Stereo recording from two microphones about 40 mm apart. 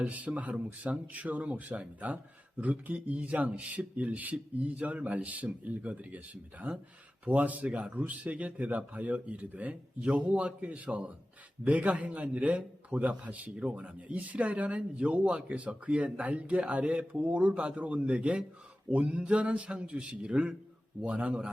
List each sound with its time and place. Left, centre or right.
0.0 s speech: right
17.7 s a man's voice: right
21.0 s speech: right